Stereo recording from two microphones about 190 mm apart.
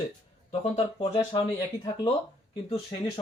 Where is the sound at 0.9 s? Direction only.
30° left (ahead or behind).